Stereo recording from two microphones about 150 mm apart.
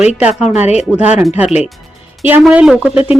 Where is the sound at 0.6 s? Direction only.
50° left (ahead or behind).